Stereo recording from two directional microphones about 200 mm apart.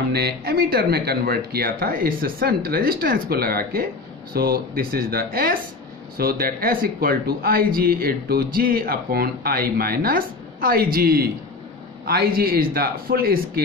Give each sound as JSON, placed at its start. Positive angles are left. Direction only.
{"t": 0.1, "sound": "speech", "side_deg": -50}